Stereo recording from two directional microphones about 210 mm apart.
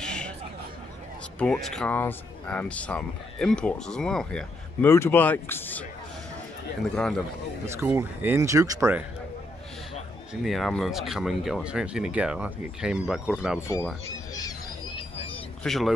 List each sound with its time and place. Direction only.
0.0 s a sound: 5° left (ahead or behind)
1.4 s speech: 5° left (ahead or behind)
7.6 s speech: 10° right (ahead or behind)
10.4 s speech: centre (ahead or behind)
13.6 s speech: 15° left (ahead or behind)
15.0 s vehicle: 25° left (ahead or behind)
15.6 s speech: centre (ahead or behind)